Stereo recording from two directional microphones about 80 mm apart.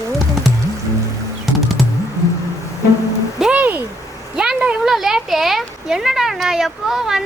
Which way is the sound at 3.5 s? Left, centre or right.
Right.